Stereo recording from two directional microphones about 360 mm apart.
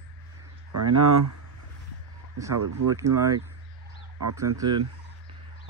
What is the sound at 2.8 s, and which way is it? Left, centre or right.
Speech, right.